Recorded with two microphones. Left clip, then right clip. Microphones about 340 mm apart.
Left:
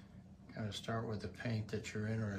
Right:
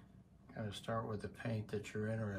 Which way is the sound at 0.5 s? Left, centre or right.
Centre.